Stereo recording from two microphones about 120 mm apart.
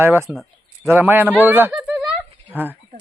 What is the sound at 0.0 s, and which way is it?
Speech, 20° right (ahead or behind).